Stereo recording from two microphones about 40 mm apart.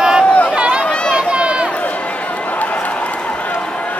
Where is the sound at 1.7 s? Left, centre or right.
Left.